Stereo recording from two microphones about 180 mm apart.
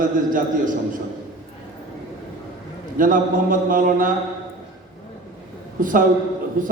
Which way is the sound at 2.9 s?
50° right (ahead or behind).